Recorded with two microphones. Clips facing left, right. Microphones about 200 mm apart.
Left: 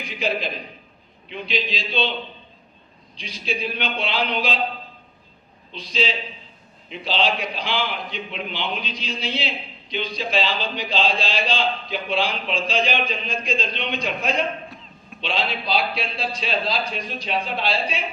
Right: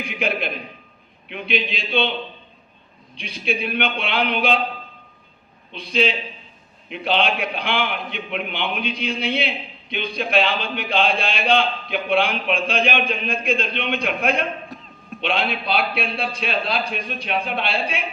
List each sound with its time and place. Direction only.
0.0 s a man's voice: 60° right (ahead or behind)
3.2 s a man's voice: 60° right (ahead or behind)
5.7 s a man's voice: 60° right (ahead or behind)